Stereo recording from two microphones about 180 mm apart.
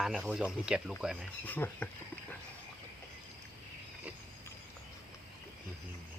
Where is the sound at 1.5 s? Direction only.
10° left (ahead or behind).